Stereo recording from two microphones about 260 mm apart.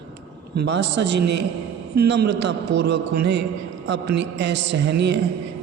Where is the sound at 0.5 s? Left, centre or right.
Right.